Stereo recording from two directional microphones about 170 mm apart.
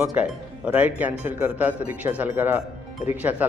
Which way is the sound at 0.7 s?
10° right (ahead or behind).